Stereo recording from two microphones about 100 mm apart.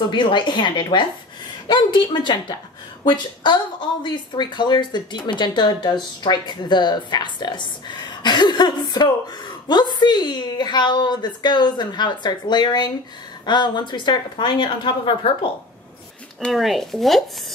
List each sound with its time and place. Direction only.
0.1 s a woman's voice: 50° left (ahead or behind)
4.0 s a woman's voice: 50° left (ahead or behind)
16.3 s speech: centre (ahead or behind)